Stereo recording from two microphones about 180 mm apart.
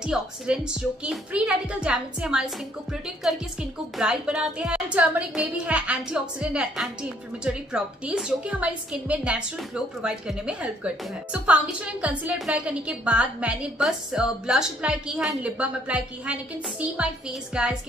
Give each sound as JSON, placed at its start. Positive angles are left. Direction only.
{"t": 0.0, "sound": "a woman's voice", "side_deg": -5}